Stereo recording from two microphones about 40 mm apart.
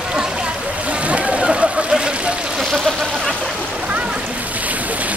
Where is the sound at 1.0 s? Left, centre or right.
Right.